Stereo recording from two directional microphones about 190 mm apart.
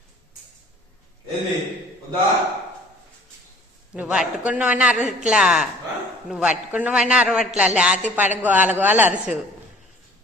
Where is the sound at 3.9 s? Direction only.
5° right (ahead or behind).